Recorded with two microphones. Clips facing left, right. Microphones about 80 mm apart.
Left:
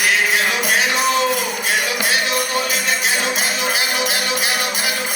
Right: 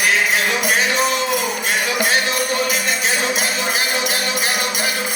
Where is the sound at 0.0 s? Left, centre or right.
Right.